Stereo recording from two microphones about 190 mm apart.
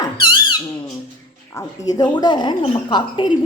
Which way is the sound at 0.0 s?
25° left (ahead or behind).